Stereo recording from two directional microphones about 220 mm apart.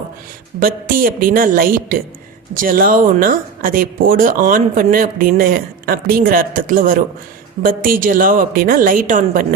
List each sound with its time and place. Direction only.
0.6 s speech: 40° right (ahead or behind)